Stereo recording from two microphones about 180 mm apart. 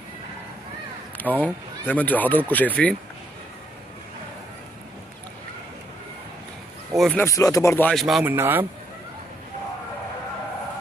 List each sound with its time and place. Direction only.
1.1 s speech: 10° left (ahead or behind)
7.0 s speech: centre (ahead or behind)
7.2 s speech: 15° left (ahead or behind)
7.9 s speech: centre (ahead or behind)